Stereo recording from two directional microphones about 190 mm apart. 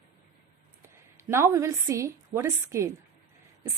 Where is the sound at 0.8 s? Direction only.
15° right (ahead or behind).